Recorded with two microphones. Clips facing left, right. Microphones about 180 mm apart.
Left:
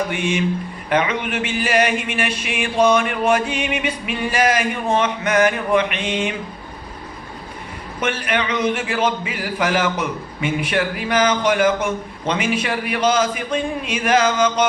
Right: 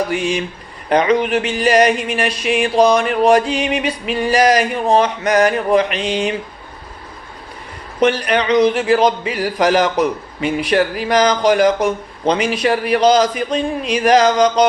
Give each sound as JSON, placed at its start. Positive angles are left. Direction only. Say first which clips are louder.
{"t": 0.1, "sound": "speech", "louder": "right 1 dB", "side_deg": -35}
{"t": 8.0, "sound": "speech", "louder": "right 7 dB", "side_deg": -35}